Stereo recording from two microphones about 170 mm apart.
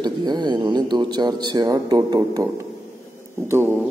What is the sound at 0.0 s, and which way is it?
Speech, 25° right (ahead or behind).